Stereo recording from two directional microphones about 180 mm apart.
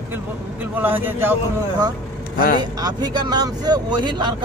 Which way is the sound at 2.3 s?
55° left (ahead or behind).